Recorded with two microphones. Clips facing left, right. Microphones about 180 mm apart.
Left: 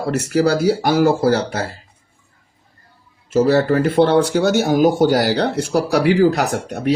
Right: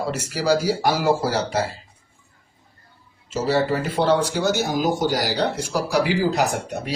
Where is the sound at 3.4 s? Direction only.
60° left (ahead or behind).